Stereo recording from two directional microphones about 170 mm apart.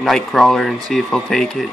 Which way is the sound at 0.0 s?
Centre (ahead or behind).